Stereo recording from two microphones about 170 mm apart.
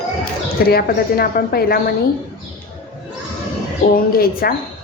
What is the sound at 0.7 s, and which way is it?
A woman's voice, 65° left (ahead or behind).